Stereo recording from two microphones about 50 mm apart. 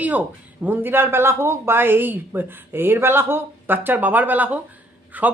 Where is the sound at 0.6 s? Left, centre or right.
Right.